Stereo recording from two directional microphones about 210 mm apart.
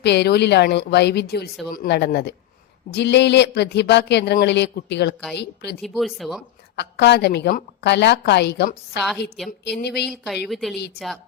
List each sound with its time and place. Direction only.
0.0 s a woman's voice: 55° left (ahead or behind)
5.8 s speech: centre (ahead or behind)
6.7 s a woman's voice: 55° left (ahead or behind)
10.5 s speech: centre (ahead or behind)
10.8 s a woman's voice: 50° left (ahead or behind)